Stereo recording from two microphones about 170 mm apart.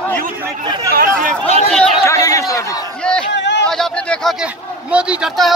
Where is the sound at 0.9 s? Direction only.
55° right (ahead or behind).